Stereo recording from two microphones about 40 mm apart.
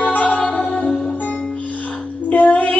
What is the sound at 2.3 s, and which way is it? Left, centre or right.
Music, left.